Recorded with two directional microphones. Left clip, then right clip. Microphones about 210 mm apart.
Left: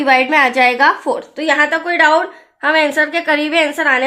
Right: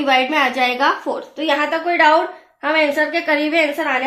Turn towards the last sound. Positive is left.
turn(degrees=40)  # may be behind; listen again after turning